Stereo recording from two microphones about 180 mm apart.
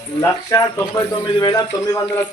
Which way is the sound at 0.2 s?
15° left (ahead or behind).